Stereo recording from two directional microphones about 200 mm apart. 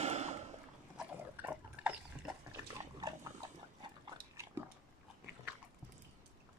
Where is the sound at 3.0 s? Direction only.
15° right (ahead or behind).